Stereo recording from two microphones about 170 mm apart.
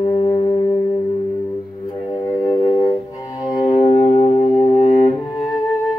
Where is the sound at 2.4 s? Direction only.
30° left (ahead or behind).